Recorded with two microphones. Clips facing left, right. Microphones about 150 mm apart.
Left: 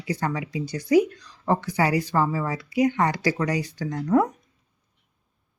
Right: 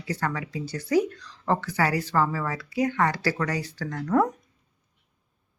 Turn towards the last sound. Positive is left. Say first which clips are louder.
# left 2 dB
turn(degrees=10)  # may be behind; listen again after turning